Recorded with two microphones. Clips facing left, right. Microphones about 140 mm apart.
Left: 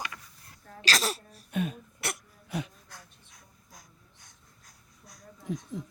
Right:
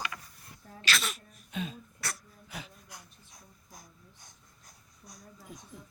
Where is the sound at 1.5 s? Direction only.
55° left (ahead or behind).